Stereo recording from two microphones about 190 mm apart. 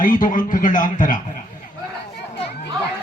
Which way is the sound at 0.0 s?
45° left (ahead or behind).